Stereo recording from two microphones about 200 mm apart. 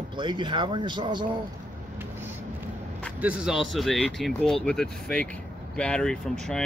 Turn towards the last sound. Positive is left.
turn(degrees=5)  # may be behind; listen again after turning